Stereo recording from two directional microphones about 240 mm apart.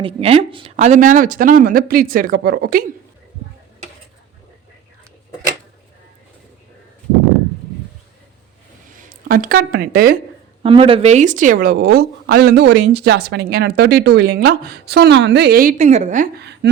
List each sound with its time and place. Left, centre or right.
0.0 s a woman's voice: right
8.9 s speech: right
10.6 s a woman's voice: right